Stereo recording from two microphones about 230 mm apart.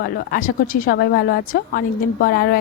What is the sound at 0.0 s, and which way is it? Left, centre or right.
A woman's voice, left.